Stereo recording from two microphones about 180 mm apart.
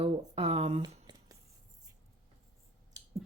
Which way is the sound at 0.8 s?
20° right (ahead or behind).